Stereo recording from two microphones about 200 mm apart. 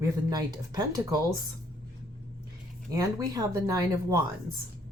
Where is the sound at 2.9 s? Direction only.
20° right (ahead or behind).